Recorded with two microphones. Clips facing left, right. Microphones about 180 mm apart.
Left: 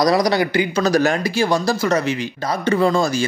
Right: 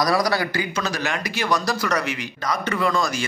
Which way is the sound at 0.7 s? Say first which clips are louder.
Left 9 dB; 40° left (ahead or behind).